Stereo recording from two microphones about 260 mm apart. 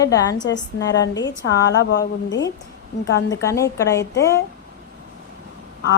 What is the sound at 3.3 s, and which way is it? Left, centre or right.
Speech, centre.